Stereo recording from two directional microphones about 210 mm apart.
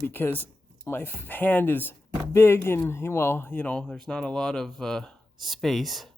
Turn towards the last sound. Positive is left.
turn(degrees=0)  # may be behind; listen again after turning